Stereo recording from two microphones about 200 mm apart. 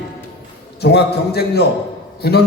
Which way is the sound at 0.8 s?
55° left (ahead or behind).